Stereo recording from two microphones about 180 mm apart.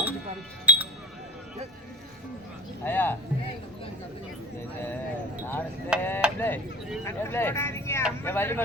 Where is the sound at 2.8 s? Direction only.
10° left (ahead or behind).